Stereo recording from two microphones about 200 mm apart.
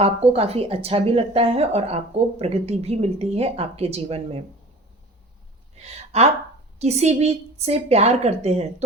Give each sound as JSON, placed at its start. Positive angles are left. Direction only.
{"t": 0.0, "sound": "a woman's voice", "side_deg": -30}
{"t": 5.7, "sound": "a sound", "side_deg": -30}
{"t": 6.7, "sound": "a woman's voice", "side_deg": -35}